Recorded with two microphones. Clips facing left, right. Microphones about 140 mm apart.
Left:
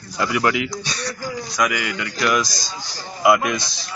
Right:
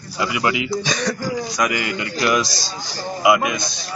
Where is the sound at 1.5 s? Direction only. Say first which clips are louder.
Left 3 dB; 30° right (ahead or behind).